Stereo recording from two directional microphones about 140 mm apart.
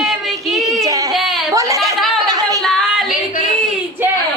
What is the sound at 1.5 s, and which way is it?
Speech, 25° right (ahead or behind).